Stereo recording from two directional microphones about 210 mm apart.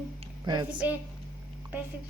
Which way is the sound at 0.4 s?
20° right (ahead or behind).